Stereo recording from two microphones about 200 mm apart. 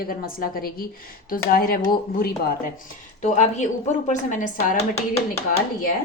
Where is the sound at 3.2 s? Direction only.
35° left (ahead or behind).